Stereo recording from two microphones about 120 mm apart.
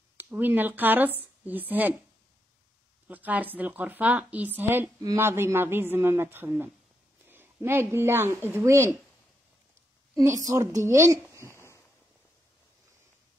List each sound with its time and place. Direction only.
0.2 s a woman's voice: 15° right (ahead or behind)
3.1 s a woman's voice: 15° right (ahead or behind)
10.4 s a woman's voice: 30° right (ahead or behind)
11.5 s a sound: 20° left (ahead or behind)